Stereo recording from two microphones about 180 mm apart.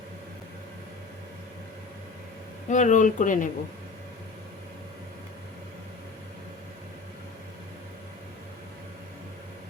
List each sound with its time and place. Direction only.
2.6 s speech: 40° left (ahead or behind)